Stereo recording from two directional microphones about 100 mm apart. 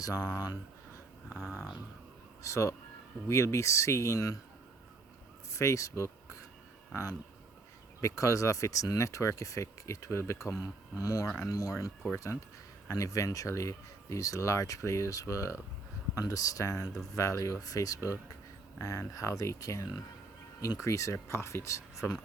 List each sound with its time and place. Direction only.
0.0 s speech: 35° left (ahead or behind)
2.4 s speech: 30° left (ahead or behind)
5.5 s speech: 30° left (ahead or behind)
20.8 s speech: 30° left (ahead or behind)